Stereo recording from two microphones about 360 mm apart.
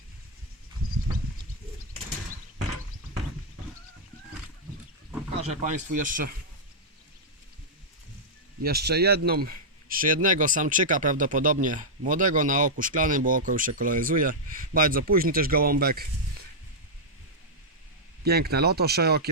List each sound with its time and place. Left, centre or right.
5.4 s speech: centre
8.6 s speech: right
18.3 s speech: right